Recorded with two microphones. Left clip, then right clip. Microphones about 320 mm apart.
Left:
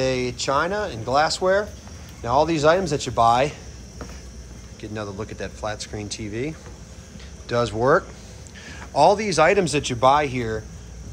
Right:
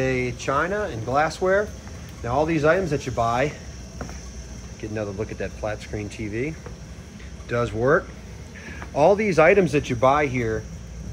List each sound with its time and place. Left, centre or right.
0.0 s speech: centre
4.9 s speech: centre